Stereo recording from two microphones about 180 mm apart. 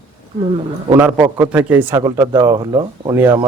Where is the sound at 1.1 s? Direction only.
15° right (ahead or behind).